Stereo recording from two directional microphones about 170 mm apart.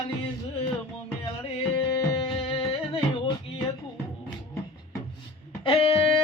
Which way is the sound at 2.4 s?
35° left (ahead or behind).